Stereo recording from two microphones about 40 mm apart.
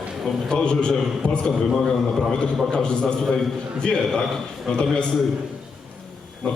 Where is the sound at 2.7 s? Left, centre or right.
Left.